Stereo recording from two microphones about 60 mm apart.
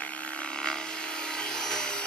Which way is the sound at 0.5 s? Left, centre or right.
Centre.